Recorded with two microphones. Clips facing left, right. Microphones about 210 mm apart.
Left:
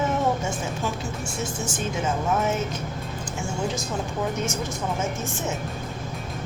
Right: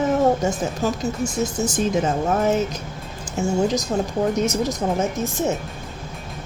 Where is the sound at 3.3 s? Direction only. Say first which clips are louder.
Right 9 dB; 40° right (ahead or behind).